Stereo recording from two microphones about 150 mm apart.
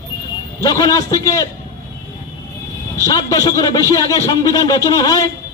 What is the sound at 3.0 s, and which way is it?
A man's voice, 25° left (ahead or behind).